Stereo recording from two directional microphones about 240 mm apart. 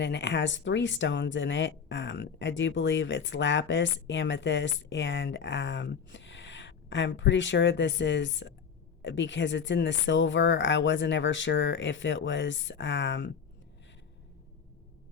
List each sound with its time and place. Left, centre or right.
0.0 s speech: left